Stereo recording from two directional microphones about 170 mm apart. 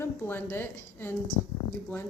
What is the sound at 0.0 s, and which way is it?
A woman's voice, 15° left (ahead or behind).